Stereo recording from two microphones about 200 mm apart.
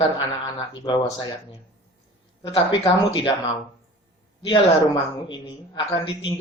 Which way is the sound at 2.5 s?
30° left (ahead or behind).